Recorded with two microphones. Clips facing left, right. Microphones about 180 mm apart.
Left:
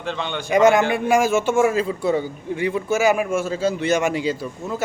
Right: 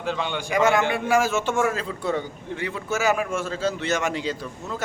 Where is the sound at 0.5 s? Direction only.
20° left (ahead or behind).